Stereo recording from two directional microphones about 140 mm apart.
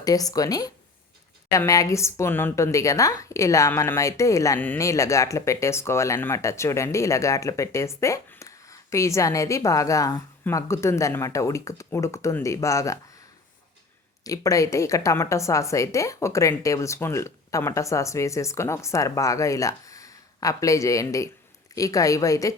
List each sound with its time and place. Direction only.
0.0 s a woman's voice: 25° left (ahead or behind)
14.3 s a woman's voice: 25° left (ahead or behind)